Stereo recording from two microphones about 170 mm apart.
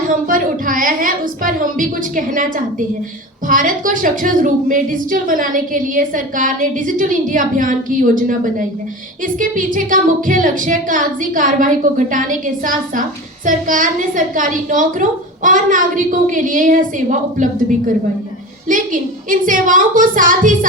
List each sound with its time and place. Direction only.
0.1 s a woman's voice: 55° right (ahead or behind)
3.5 s a woman's voice: 50° right (ahead or behind)